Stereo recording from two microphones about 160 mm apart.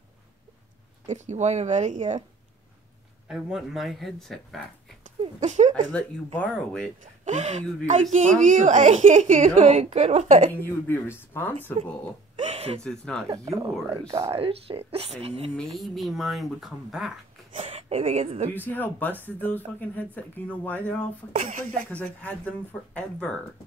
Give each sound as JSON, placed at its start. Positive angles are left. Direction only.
{"t": 1.0, "sound": "a woman's voice", "side_deg": -45}
{"t": 3.3, "sound": "speech", "side_deg": -5}
{"t": 5.2, "sound": "speech", "side_deg": -45}
{"t": 5.9, "sound": "speech", "side_deg": 10}
{"t": 7.0, "sound": "a woman's voice", "side_deg": -50}
{"t": 10.9, "sound": "speech", "side_deg": 15}
{"t": 12.4, "sound": "a sound", "side_deg": -40}
{"t": 12.8, "sound": "speech", "side_deg": 5}
{"t": 13.3, "sound": "speech", "side_deg": -25}
{"t": 15.8, "sound": "speech", "side_deg": 0}
{"t": 17.6, "sound": "a woman's voice", "side_deg": -40}
{"t": 18.5, "sound": "speech", "side_deg": 10}
{"t": 21.3, "sound": "a woman's voice", "side_deg": -50}
{"t": 21.9, "sound": "speech", "side_deg": 10}